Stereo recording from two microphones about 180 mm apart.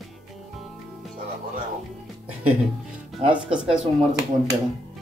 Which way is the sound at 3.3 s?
5° right (ahead or behind).